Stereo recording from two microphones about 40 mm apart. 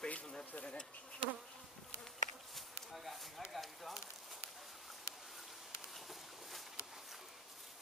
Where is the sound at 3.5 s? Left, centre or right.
Centre.